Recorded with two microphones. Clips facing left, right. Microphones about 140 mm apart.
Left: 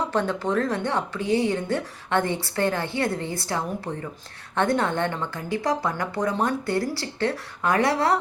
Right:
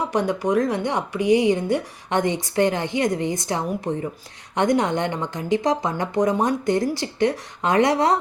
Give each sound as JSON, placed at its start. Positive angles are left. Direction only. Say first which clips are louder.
{"t": 0.1, "sound": "speech", "louder": "right 3 dB", "side_deg": -15}